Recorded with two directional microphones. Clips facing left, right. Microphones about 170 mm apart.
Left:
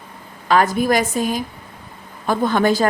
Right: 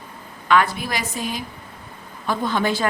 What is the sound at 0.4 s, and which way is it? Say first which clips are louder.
Speech: left 4 dB; 40° left (ahead or behind).